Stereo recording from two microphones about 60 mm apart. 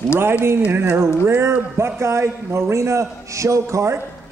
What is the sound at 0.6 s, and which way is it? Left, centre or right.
Speech, right.